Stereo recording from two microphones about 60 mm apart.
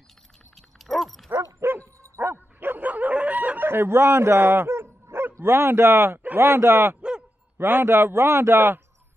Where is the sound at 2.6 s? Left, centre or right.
Right.